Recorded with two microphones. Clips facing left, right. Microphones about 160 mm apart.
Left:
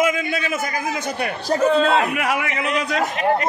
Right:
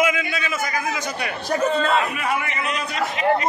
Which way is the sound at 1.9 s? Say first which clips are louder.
Left 2 dB; 70° left (ahead or behind).